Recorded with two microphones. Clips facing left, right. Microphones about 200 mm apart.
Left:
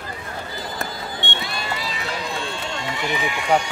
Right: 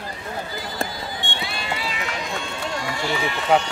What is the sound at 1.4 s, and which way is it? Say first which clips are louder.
Run: even; 40° left (ahead or behind).